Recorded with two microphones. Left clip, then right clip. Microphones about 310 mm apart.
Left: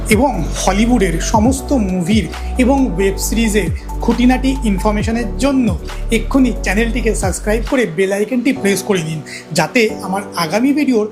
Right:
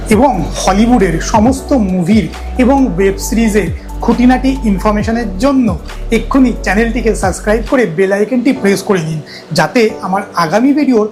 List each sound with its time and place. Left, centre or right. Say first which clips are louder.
0.1 s speech: right 4 dB; left